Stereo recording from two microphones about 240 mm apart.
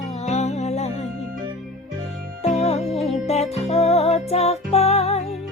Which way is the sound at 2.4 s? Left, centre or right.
Left.